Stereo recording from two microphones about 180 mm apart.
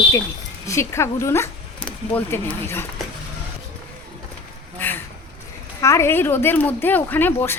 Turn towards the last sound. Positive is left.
turn(degrees=10)  # may be behind; listen again after turning